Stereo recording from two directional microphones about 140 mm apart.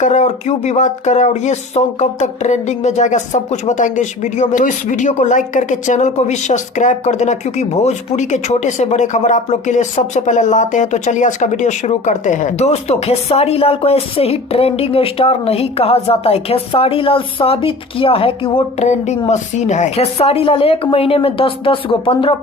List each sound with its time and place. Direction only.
0.0 s speech: 55° left (ahead or behind); by 18.9 s 40° left (ahead or behind)
19.3 s speech: 55° left (ahead or behind)
20.1 s a woman's voice: 45° left (ahead or behind)